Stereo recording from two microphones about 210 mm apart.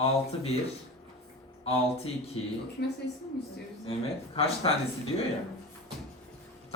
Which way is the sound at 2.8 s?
50° left (ahead or behind).